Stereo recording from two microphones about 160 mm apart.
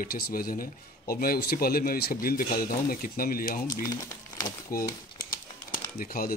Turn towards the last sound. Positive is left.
turn(degrees=65)  # may be behind; listen again after turning